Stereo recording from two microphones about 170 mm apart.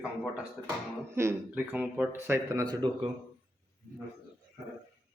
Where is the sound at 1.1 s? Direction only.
15° right (ahead or behind).